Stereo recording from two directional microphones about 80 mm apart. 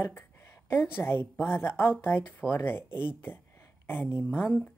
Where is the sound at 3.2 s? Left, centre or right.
Left.